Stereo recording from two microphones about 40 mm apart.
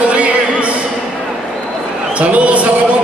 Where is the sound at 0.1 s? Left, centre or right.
Right.